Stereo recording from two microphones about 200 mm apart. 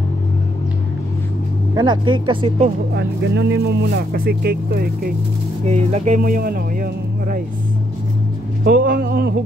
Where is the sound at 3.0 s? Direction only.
60° right (ahead or behind).